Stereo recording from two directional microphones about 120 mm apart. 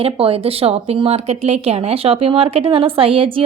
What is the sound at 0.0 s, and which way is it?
Speech, 50° right (ahead or behind).